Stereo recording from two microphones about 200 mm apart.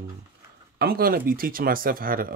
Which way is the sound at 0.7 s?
50° right (ahead or behind).